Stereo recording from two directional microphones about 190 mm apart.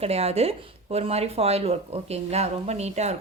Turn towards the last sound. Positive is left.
turn(degrees=-35)  # may be behind; listen again after turning